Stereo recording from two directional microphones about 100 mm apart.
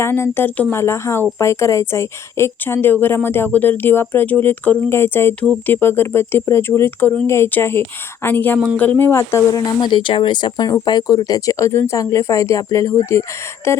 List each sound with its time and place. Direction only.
0.0 s speech: 25° left (ahead or behind)
0.8 s speech: 25° left (ahead or behind)
9.9 s speech: 55° left (ahead or behind); by 13.8 s 25° left (ahead or behind)